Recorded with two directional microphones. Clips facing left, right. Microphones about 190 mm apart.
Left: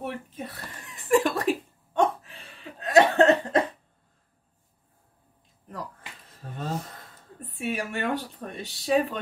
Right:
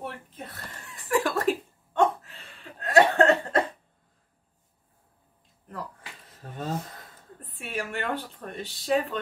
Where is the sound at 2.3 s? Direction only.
15° left (ahead or behind).